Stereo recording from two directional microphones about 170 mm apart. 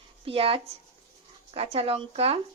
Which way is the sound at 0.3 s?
35° right (ahead or behind).